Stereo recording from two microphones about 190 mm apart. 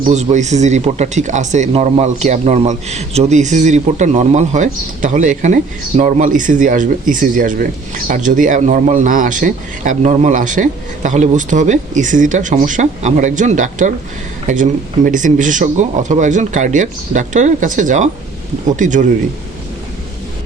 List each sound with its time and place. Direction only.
0.1 s a man's voice: 40° right (ahead or behind)